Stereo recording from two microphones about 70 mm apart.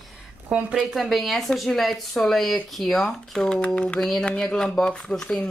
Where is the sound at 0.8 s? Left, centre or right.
Centre.